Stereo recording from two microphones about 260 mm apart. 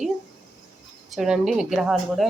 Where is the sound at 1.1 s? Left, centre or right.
Centre.